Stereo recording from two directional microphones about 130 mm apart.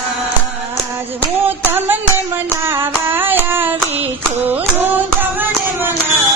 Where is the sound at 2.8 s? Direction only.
15° right (ahead or behind).